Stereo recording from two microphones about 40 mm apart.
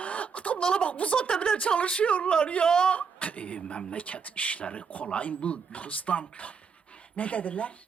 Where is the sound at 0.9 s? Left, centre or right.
Left.